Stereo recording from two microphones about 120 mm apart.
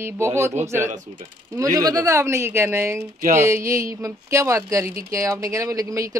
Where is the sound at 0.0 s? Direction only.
20° right (ahead or behind).